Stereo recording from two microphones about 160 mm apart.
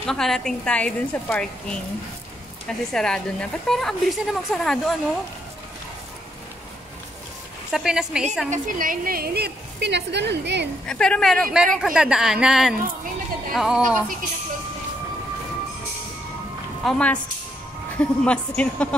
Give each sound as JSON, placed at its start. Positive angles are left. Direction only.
{"t": 0.0, "sound": "a woman's voice", "side_deg": 5}
{"t": 2.9, "sound": "a woman's voice", "side_deg": 5}
{"t": 7.7, "sound": "a woman's voice", "side_deg": -5}
{"t": 8.5, "sound": "a woman's voice", "side_deg": -55}
{"t": 10.9, "sound": "a woman's voice", "side_deg": 5}
{"t": 16.8, "sound": "speech", "side_deg": 5}